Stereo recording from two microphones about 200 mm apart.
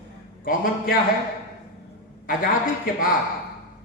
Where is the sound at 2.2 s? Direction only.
45° left (ahead or behind).